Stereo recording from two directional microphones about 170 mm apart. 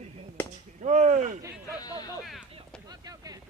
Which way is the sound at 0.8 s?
45° right (ahead or behind).